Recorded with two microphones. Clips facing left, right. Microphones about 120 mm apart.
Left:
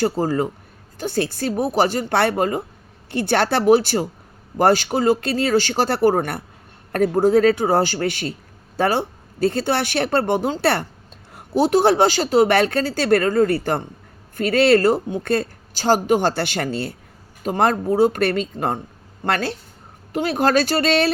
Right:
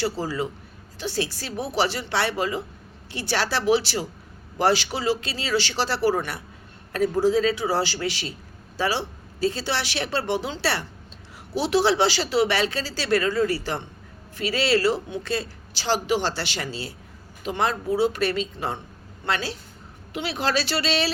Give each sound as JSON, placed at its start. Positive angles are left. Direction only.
{"t": 0.0, "sound": "a man's voice", "side_deg": 50}